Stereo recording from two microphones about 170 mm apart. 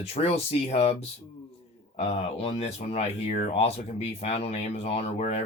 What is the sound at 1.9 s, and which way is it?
Speech, 35° left (ahead or behind).